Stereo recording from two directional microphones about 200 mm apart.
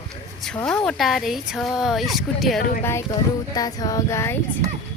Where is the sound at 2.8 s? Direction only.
10° left (ahead or behind).